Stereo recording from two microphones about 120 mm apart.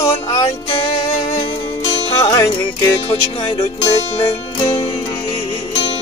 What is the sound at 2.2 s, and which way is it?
Music, 30° left (ahead or behind).